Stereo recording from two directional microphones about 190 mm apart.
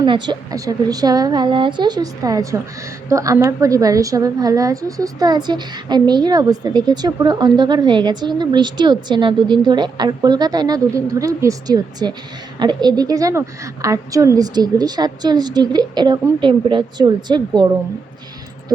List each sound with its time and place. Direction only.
0.0 s a woman's voice: 20° right (ahead or behind)